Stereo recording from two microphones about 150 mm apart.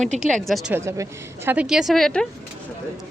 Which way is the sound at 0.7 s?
20° right (ahead or behind).